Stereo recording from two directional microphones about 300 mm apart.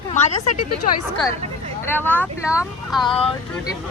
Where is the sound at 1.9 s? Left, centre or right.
Centre.